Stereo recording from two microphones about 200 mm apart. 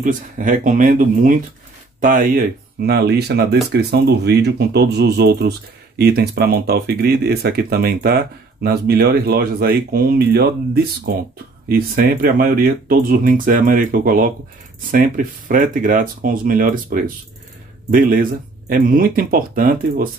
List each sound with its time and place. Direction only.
0.0 s speech: 40° right (ahead or behind)